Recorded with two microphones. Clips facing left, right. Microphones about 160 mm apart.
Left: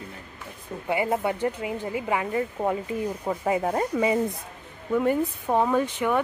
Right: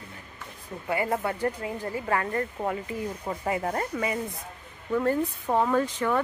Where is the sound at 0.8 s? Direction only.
20° left (ahead or behind).